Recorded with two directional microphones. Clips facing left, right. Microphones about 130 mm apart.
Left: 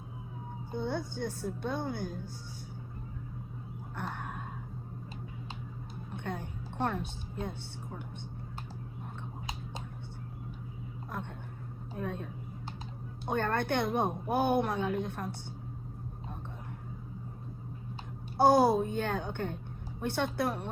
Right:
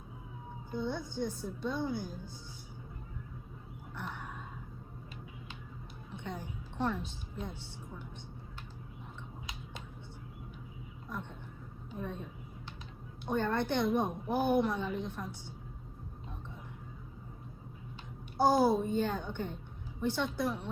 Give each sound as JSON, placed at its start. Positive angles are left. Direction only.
{"t": 0.7, "sound": "a woman's voice", "side_deg": 55}
{"t": 3.9, "sound": "a sound", "side_deg": 55}
{"t": 6.2, "sound": "a sound", "side_deg": 55}
{"t": 11.9, "sound": "vehicle", "side_deg": 60}
{"t": 13.3, "sound": "a woman's voice", "side_deg": 60}
{"t": 18.3, "sound": "a woman's voice", "side_deg": 65}